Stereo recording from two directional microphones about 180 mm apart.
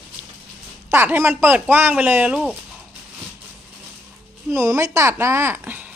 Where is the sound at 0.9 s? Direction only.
10° right (ahead or behind).